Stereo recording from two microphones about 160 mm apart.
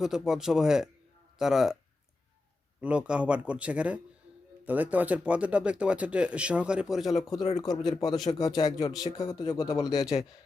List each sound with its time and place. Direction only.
0.0 s speech: 5° right (ahead or behind)
2.8 s speech: 5° right (ahead or behind)
7.5 s speech: 25° left (ahead or behind)